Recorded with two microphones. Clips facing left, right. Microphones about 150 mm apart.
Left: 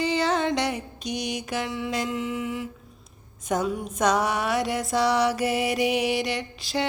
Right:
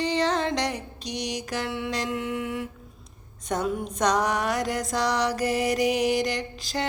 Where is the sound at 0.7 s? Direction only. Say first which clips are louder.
Left 3 dB; 35° right (ahead or behind).